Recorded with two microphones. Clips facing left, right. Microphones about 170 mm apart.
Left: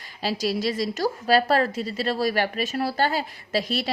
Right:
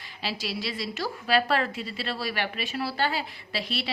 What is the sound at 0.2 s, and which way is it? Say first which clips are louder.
A woman's voice: left 8 dB; 40° left (ahead or behind).